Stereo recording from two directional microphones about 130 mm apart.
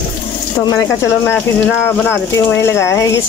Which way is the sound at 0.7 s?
15° left (ahead or behind).